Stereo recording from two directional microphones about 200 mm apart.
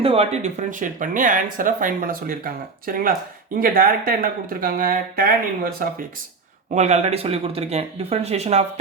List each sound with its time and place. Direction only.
0.0 s speech: 30° right (ahead or behind); by 5.9 s 45° right (ahead or behind)
6.7 s speech: 35° right (ahead or behind)